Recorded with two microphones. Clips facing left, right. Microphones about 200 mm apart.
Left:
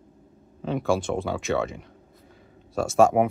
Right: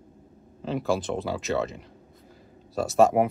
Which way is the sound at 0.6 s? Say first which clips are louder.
Left 2 dB; centre (ahead or behind).